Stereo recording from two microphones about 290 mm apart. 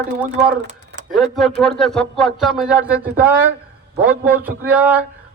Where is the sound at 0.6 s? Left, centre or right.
Right.